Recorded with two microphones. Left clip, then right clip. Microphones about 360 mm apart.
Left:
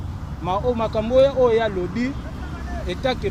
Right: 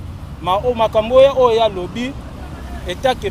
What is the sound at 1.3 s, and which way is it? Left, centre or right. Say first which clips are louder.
Speech: right 5 dB; right.